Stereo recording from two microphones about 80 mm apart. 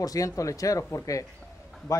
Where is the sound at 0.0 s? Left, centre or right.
Left.